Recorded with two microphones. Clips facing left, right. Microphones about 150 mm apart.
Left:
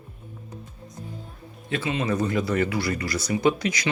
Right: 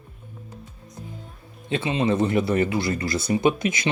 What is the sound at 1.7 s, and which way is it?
Speech, 25° right (ahead or behind).